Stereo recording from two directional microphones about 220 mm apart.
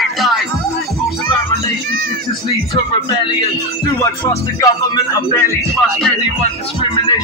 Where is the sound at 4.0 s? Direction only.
15° left (ahead or behind).